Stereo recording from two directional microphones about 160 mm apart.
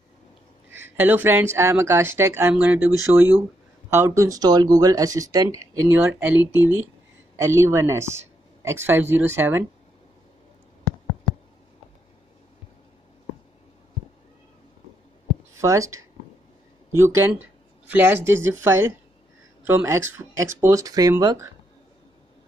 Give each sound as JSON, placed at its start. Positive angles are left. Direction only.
{"t": 0.7, "sound": "speech", "side_deg": -15}
{"t": 3.9, "sound": "speech", "side_deg": -15}
{"t": 15.5, "sound": "speech", "side_deg": -20}